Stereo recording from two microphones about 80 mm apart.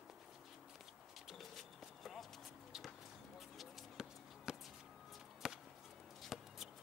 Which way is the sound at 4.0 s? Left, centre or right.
Centre.